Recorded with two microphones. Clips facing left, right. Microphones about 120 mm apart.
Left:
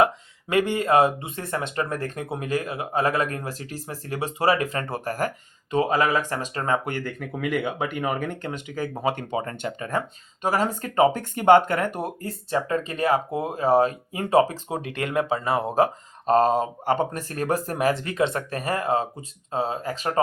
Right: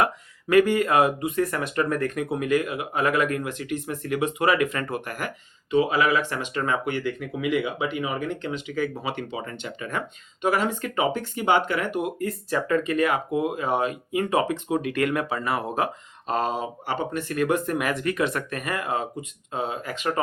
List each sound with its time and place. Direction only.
0.0 s speech: 25° left (ahead or behind)